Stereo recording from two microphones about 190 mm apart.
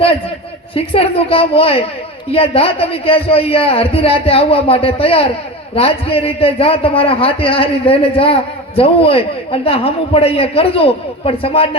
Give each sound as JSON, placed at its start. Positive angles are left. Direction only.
{"t": 0.8, "sound": "a man's voice", "side_deg": 30}